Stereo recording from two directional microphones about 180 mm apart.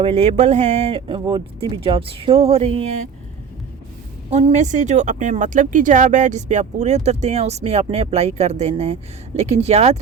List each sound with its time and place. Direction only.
0.0 s speech: 35° right (ahead or behind)
4.3 s speech: 35° right (ahead or behind)